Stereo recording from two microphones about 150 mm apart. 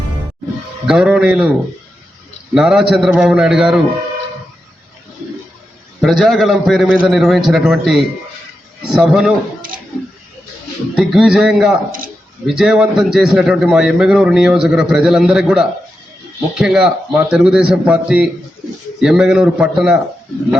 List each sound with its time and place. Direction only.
0.9 s a man's voice: 5° right (ahead or behind)
2.6 s a man's voice: 5° right (ahead or behind)
6.0 s a man's voice: centre (ahead or behind)
9.6 s a sound: 65° right (ahead or behind)
10.9 s a man's voice: centre (ahead or behind)
11.9 s a man's voice: 65° right (ahead or behind)
12.5 s a man's voice: 5° right (ahead or behind)